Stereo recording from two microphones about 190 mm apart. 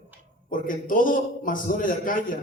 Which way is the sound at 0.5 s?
45° left (ahead or behind).